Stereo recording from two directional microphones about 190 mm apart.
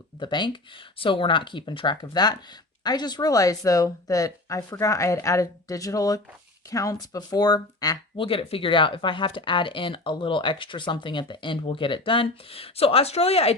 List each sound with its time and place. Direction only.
0.2 s speech: 25° left (ahead or behind)